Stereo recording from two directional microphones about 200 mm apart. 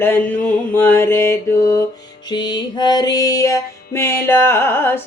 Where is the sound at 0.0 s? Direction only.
10° left (ahead or behind).